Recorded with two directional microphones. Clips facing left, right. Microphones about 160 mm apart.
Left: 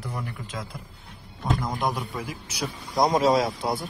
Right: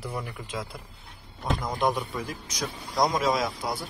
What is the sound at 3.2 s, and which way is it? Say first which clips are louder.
Speech: left 5 dB; 30° left (ahead or behind).